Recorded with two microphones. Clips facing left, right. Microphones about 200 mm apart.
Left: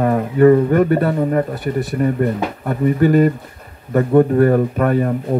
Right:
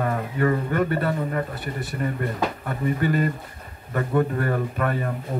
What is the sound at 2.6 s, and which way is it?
Speech, 45° left (ahead or behind).